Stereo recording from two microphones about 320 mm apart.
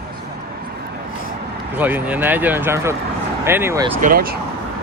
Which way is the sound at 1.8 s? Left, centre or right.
Centre.